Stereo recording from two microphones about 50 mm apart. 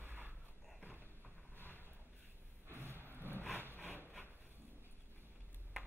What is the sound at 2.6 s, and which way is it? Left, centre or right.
Vehicle, right.